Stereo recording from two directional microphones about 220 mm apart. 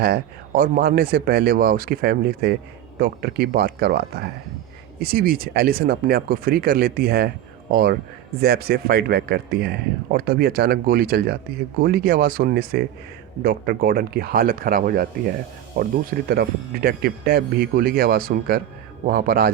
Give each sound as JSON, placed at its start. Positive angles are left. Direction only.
{"t": 0.0, "sound": "a man's voice", "side_deg": -45}